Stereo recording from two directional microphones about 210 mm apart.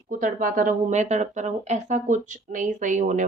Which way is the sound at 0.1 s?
40° right (ahead or behind).